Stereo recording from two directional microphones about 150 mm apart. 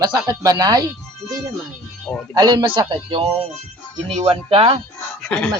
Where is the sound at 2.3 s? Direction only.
25° right (ahead or behind).